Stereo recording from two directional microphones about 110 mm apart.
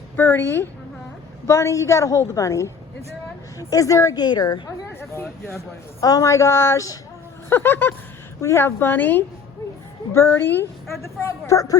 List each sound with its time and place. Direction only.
0.2 s a woman's voice: 20° left (ahead or behind); by 4.7 s 40° left (ahead or behind)
4.9 s a sound: 20° left (ahead or behind)
5.5 s a woman's voice: 30° left (ahead or behind)
7.5 s a woman's voice: 15° left (ahead or behind)